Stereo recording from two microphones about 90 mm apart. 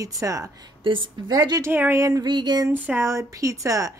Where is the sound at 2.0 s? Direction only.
40° right (ahead or behind).